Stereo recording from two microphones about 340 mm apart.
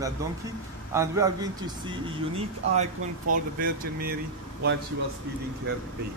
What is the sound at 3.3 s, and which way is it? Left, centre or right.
Speech, right.